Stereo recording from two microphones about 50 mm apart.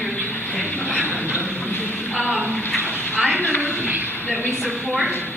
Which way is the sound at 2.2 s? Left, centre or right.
Right.